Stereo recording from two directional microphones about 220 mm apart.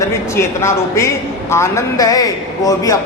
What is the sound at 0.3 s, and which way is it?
A man's voice, 10° left (ahead or behind).